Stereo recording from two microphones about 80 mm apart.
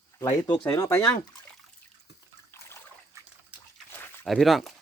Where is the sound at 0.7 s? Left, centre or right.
Left.